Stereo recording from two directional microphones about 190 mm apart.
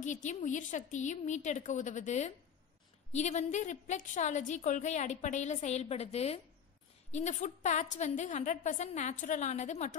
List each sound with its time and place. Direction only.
0.0 s a woman's voice: 40° left (ahead or behind)